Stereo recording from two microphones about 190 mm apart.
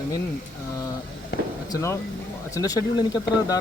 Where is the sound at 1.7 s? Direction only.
15° left (ahead or behind).